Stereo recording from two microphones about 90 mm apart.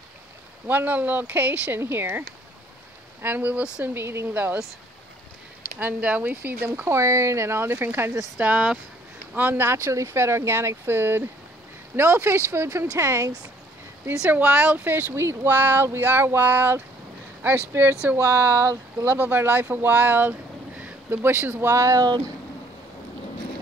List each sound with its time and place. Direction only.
0.7 s speech: 20° right (ahead or behind)
3.8 s speech: 25° right (ahead or behind)
5.8 s speech: 15° right (ahead or behind)
8.4 s speech: 15° right (ahead or behind); by 13.3 s 30° right (ahead or behind)
14.0 s speech: 20° right (ahead or behind)
18.3 s speech: 35° right (ahead or behind)
19.0 s speech: 20° right (ahead or behind)
22.0 s speech: 50° right (ahead or behind)